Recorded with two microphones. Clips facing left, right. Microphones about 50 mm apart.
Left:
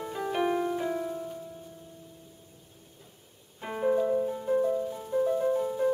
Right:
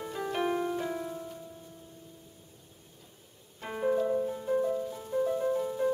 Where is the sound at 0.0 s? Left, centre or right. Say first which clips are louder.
Left 2 dB; centre.